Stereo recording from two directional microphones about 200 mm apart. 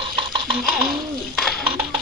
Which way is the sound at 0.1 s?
25° right (ahead or behind).